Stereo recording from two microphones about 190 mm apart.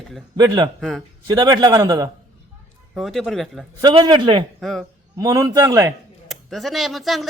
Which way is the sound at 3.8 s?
20° right (ahead or behind).